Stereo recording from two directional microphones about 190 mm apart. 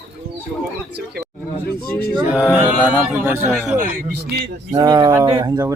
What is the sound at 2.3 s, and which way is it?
Speech, 5° right (ahead or behind).